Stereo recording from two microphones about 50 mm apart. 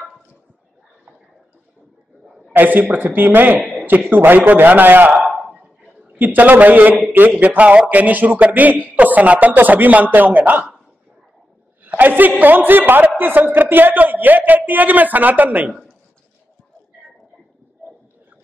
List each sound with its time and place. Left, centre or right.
2.5 s a man's voice: right
3.7 s a sound: right
4.1 s a man's voice: right
5.2 s a sound: centre
6.1 s a man's voice: right
11.8 s a man's voice: right